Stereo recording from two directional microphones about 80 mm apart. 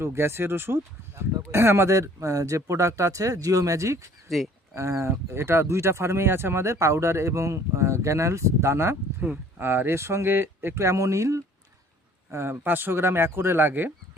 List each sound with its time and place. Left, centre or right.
0.0 s speech: right